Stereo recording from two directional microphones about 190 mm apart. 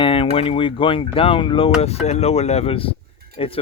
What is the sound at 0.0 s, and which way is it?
Speech, 30° left (ahead or behind).